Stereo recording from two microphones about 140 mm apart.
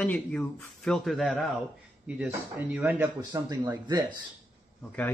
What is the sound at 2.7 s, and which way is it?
Speech, 10° right (ahead or behind).